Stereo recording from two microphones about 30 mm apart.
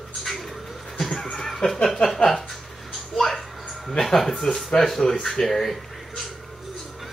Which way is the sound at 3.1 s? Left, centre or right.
Centre.